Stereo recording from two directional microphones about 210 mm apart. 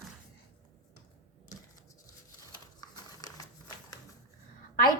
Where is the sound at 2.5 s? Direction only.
20° left (ahead or behind).